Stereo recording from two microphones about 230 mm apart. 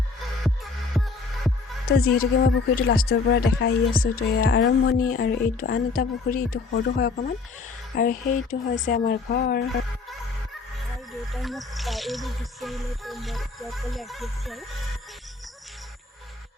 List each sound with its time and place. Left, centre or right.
0.4 s music: centre
1.9 s speech: left
11.3 s speech: centre